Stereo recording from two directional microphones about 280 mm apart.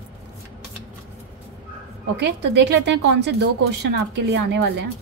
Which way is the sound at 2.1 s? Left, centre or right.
Right.